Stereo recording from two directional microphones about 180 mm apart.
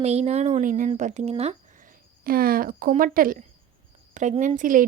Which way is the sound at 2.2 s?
55° right (ahead or behind).